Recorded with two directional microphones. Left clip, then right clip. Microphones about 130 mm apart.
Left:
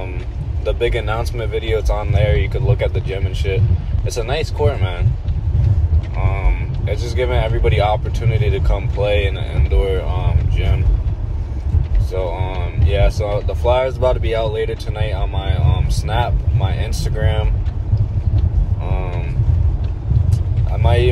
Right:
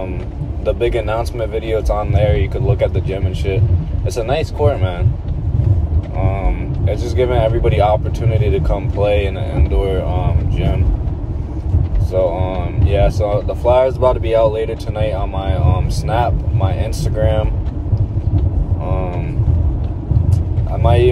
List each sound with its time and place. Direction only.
0.7 s speech: 15° right (ahead or behind)
6.1 s speech: 20° right (ahead or behind)
12.1 s speech: 15° right (ahead or behind)
18.9 s vehicle: 15° right (ahead or behind)
20.7 s speech: 15° right (ahead or behind)